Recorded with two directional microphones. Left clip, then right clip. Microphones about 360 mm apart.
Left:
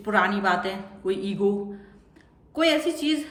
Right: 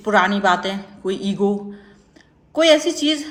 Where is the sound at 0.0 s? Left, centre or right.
Centre.